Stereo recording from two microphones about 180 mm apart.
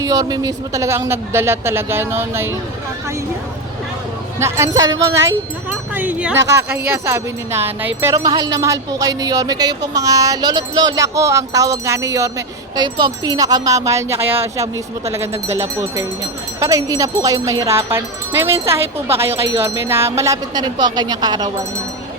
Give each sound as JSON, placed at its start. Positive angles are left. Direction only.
{"t": 0.0, "sound": "a man's voice", "side_deg": -20}
{"t": 4.4, "sound": "a man's voice", "side_deg": -15}
{"t": 5.1, "sound": "speech", "side_deg": -90}
{"t": 5.9, "sound": "a man's voice", "side_deg": -10}